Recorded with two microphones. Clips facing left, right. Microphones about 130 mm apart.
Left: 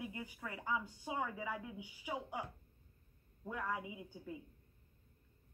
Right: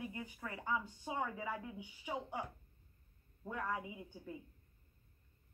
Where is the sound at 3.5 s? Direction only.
10° left (ahead or behind).